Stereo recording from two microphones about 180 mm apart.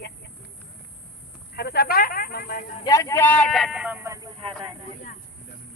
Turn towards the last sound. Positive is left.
turn(degrees=-25)  # may be behind; listen again after turning